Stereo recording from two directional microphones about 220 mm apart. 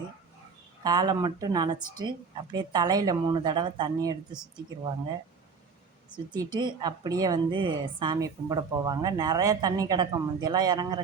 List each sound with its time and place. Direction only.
0.9 s speech: 20° right (ahead or behind)
6.1 s speech: 20° right (ahead or behind)